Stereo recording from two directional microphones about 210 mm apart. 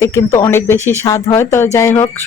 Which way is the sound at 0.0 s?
10° left (ahead or behind).